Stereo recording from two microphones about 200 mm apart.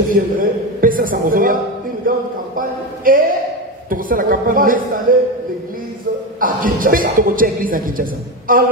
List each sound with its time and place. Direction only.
0.1 s a man's voice: 45° right (ahead or behind)
6.4 s a man's voice: 45° right (ahead or behind)